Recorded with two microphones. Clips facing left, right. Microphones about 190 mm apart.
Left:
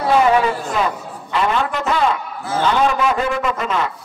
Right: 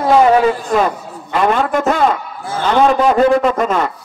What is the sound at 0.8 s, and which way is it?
A man's voice, 45° right (ahead or behind).